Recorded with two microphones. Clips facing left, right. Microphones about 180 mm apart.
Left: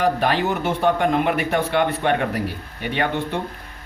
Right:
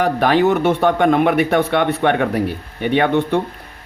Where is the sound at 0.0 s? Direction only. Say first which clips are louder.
Right 5 dB; 65° right (ahead or behind).